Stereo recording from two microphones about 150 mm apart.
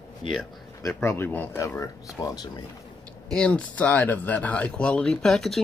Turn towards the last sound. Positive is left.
turn(degrees=0)  # may be behind; listen again after turning